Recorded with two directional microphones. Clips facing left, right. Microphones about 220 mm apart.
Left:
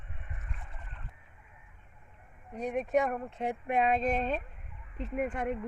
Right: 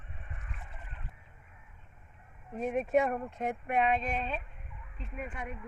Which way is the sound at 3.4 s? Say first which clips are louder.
Left 2 dB; 30° left (ahead or behind).